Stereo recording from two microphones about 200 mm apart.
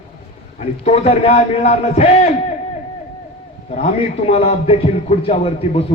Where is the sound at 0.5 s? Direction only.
30° left (ahead or behind).